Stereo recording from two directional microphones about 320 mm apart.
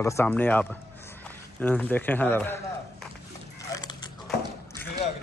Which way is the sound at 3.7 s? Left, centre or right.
Centre.